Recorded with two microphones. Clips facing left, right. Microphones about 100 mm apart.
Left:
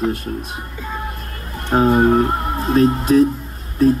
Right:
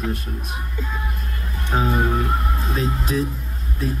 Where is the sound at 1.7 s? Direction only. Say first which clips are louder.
Left 8 dB; 50° left (ahead or behind).